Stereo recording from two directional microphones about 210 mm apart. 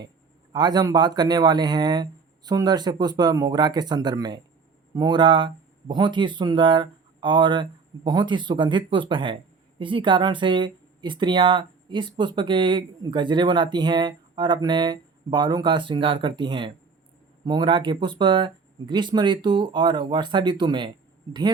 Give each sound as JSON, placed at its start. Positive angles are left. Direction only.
{"t": 0.5, "sound": "speech", "side_deg": -20}